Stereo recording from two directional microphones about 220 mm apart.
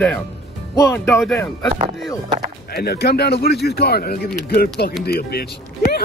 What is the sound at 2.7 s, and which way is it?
Speech, 45° left (ahead or behind).